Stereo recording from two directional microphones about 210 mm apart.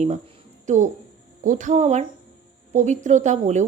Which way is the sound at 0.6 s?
35° right (ahead or behind).